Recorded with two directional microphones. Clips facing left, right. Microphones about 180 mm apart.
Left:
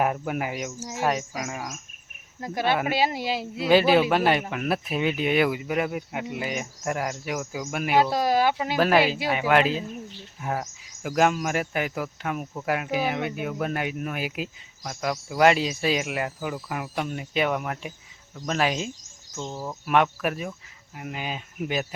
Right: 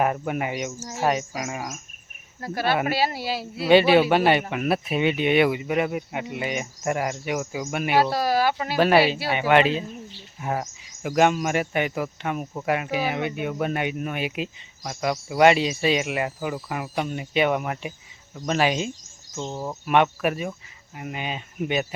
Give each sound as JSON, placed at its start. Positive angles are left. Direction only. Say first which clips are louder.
{"t": 0.0, "sound": "speech", "louder": "right 2 dB", "side_deg": 0}
{"t": 2.4, "sound": "speech", "louder": "right 1 dB", "side_deg": 20}
{"t": 3.7, "sound": "speech", "louder": "right 3 dB", "side_deg": 0}
{"t": 8.1, "sound": "speech", "louder": "even", "side_deg": 20}
{"t": 8.7, "sound": "speech", "louder": "right 4 dB", "side_deg": -5}
{"t": 19.4, "sound": "speech", "louder": "right 3 dB", "side_deg": -20}
{"t": 19.8, "sound": "speech", "louder": "right 2 dB", "side_deg": 0}